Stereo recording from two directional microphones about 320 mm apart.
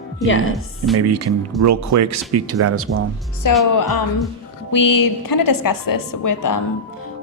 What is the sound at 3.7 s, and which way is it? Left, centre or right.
A woman's voice, left.